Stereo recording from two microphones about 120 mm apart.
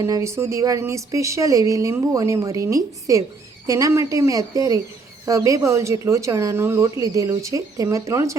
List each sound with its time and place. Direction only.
0.0 s speech: 25° right (ahead or behind)